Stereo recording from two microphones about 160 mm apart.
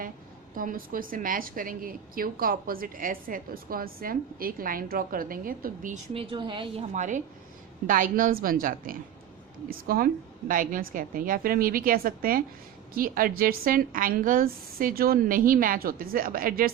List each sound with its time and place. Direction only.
0.5 s a woman's voice: 60° right (ahead or behind)
6.1 s a woman's voice: 35° right (ahead or behind)
6.9 s a woman's voice: 50° right (ahead or behind)